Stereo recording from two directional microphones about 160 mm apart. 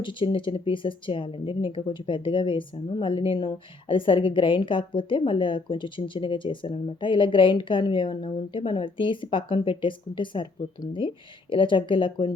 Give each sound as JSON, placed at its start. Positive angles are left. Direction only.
{"t": 0.0, "sound": "speech", "side_deg": 30}